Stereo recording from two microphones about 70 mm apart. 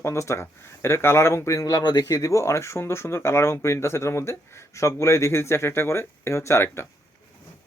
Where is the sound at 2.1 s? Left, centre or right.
Left.